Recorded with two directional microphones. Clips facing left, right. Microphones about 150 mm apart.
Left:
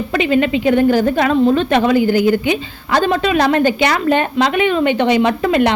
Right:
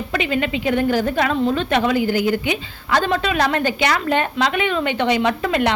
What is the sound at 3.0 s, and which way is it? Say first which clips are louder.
A woman's voice: left 6 dB; 20° left (ahead or behind).